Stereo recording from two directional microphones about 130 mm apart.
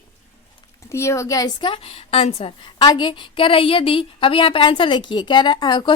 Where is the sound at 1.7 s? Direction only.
45° left (ahead or behind).